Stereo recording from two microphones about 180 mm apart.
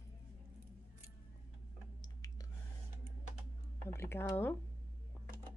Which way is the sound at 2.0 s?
20° left (ahead or behind).